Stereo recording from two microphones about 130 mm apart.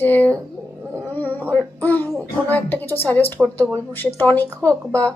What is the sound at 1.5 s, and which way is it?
A woman's voice, 15° left (ahead or behind).